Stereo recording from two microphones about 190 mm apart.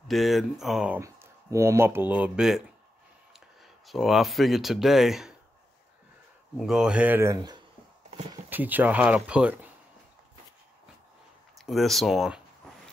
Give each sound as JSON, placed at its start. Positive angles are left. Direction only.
{"t": 0.1, "sound": "speech", "side_deg": 0}
{"t": 6.5, "sound": "speech", "side_deg": 0}
{"t": 8.5, "sound": "speech", "side_deg": -10}
{"t": 11.5, "sound": "speech", "side_deg": 0}